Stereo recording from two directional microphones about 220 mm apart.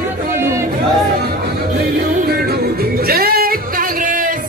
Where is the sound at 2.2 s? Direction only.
45° right (ahead or behind).